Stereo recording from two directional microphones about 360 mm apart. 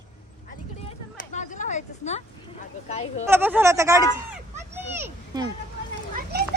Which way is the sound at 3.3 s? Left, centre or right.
Centre.